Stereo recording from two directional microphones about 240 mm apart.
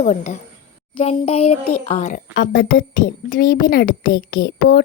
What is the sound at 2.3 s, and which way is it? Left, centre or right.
A woman's voice, left.